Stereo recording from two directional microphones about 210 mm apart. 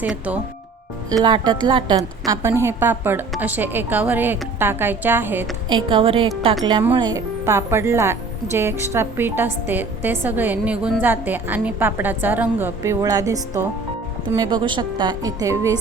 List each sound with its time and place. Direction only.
0.0 s a woman's voice: 5° right (ahead or behind)
1.1 s a woman's voice: 20° right (ahead or behind)
5.6 s a woman's voice: 25° right (ahead or behind)